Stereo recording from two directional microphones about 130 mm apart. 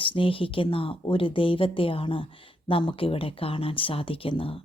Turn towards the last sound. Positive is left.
turn(degrees=45)  # may be behind; listen again after turning